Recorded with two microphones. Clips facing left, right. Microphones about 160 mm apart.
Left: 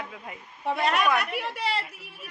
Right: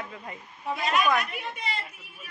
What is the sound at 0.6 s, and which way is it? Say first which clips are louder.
A woman's voice: left 1 dB; 65° left (ahead or behind).